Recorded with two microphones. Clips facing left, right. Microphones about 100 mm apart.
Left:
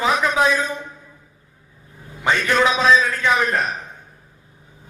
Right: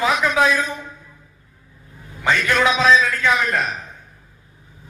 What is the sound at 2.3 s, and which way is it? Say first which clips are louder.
A man's voice: even; 25° left (ahead or behind).